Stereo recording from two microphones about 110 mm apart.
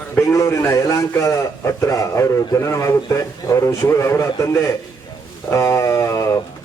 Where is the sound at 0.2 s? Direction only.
30° left (ahead or behind).